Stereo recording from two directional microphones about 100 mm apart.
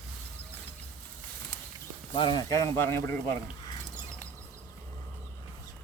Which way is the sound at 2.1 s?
50° left (ahead or behind).